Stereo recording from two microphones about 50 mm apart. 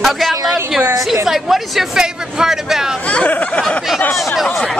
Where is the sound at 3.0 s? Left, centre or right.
Left.